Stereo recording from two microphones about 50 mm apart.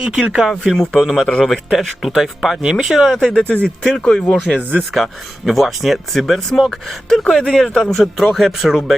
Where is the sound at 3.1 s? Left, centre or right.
Centre.